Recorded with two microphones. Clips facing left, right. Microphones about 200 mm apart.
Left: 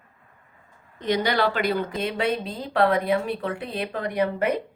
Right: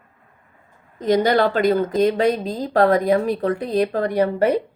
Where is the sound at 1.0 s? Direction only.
45° right (ahead or behind).